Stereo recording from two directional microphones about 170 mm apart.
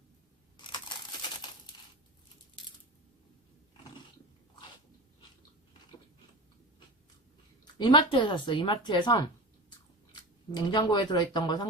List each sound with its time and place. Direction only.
0.5 s a sound: 25° left (ahead or behind)
7.8 s speech: 25° left (ahead or behind)
10.5 s speech: 25° left (ahead or behind)